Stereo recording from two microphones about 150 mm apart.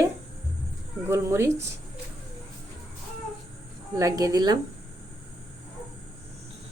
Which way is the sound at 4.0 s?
25° right (ahead or behind).